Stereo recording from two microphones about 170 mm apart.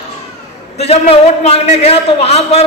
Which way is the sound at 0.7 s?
40° left (ahead or behind).